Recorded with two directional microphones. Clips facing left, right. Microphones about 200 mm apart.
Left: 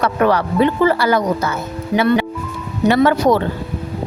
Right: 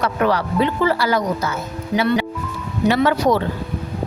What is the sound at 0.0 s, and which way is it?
A woman's voice, 60° left (ahead or behind).